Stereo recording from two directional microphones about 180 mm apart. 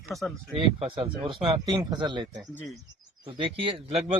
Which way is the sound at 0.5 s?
30° right (ahead or behind).